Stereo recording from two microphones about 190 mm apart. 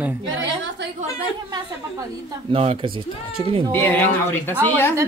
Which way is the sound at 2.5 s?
30° right (ahead or behind).